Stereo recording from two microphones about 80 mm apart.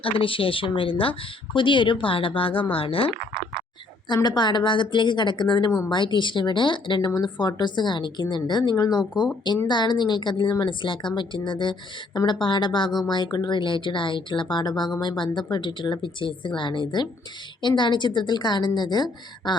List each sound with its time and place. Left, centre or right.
0.2 s speech: left
4.1 s a woman's voice: left
5.9 s speech: left
7.0 s a woman's voice: left
8.7 s speech: left
9.6 s a woman's voice: left
12.1 s a woman's voice: left